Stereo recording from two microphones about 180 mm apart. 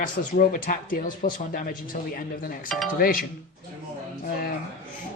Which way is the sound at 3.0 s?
55° left (ahead or behind).